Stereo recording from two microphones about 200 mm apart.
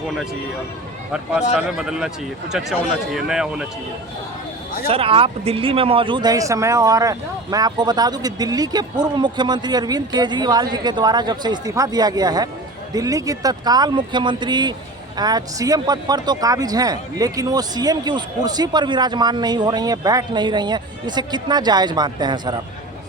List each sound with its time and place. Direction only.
1.1 s speech: 5° right (ahead or behind)
4.9 s speech: 30° right (ahead or behind)